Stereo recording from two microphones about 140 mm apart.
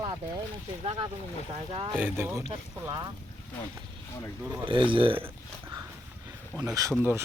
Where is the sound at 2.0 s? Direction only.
15° right (ahead or behind).